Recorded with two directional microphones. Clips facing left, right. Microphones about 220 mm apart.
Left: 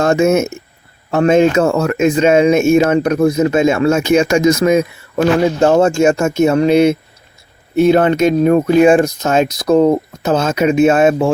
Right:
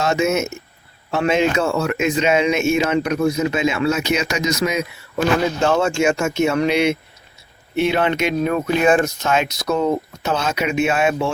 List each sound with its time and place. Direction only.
0.0 s speech: 50° left (ahead or behind)
5.5 s speech: 40° left (ahead or behind)